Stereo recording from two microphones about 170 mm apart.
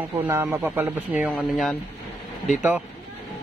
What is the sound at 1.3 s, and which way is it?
Speech, centre (ahead or behind).